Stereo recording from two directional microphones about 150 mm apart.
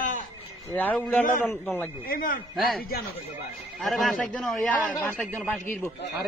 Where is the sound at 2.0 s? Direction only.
75° left (ahead or behind).